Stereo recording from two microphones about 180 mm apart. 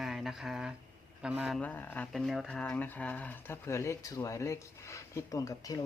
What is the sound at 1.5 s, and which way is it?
Speech, 10° left (ahead or behind).